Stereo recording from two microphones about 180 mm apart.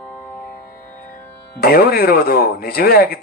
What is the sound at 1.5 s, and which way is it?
Speech, 60° left (ahead or behind).